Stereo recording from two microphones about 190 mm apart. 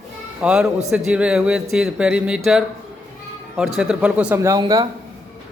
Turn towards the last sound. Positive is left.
turn(degrees=-20)  # may be behind; listen again after turning